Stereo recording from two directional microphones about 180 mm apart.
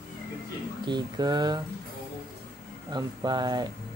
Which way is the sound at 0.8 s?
25° right (ahead or behind).